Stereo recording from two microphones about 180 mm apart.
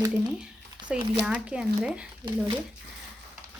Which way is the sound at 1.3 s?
5° right (ahead or behind).